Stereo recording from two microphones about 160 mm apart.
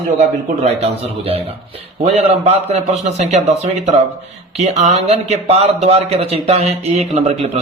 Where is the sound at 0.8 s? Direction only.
40° right (ahead or behind).